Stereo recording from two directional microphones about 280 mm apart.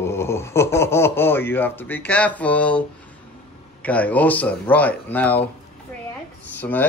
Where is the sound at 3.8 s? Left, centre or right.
Centre.